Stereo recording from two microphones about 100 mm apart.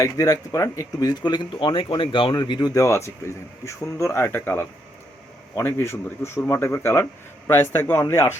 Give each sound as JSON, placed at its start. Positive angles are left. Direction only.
{"t": 0.0, "sound": "speech", "side_deg": 35}
{"t": 2.3, "sound": "a man's voice", "side_deg": 45}